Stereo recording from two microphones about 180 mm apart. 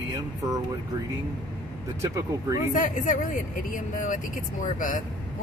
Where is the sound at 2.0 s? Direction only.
15° right (ahead or behind).